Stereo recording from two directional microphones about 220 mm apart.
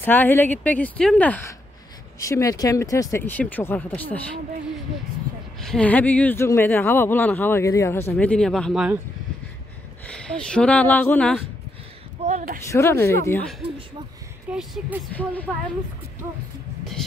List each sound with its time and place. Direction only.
0.0 s speech: 10° left (ahead or behind)
5.6 s speech: 5° left (ahead or behind)
10.0 s speech: 5° left (ahead or behind)
12.3 s speech: 35° right (ahead or behind)
12.7 s speech: 10° left (ahead or behind)
14.5 s speech: 5° right (ahead or behind)